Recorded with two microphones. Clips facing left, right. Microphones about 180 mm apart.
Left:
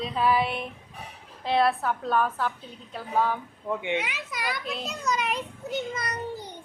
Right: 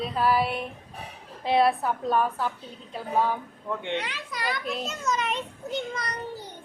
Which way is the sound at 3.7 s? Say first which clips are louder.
Left 2 dB; 10° left (ahead or behind).